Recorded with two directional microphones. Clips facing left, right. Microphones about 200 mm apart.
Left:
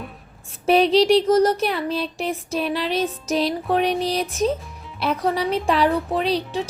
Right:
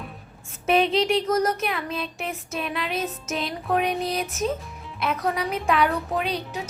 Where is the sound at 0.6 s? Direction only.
35° left (ahead or behind).